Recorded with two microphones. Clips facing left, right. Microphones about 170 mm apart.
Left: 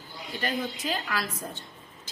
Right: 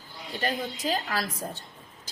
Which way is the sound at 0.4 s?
40° right (ahead or behind).